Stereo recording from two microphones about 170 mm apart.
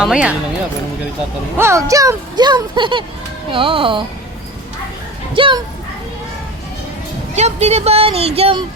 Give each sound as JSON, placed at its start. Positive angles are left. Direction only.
{"t": 0.0, "sound": "speech", "side_deg": -5}
{"t": 1.5, "sound": "speech", "side_deg": -15}
{"t": 5.3, "sound": "speech", "side_deg": -30}
{"t": 7.3, "sound": "speech", "side_deg": -40}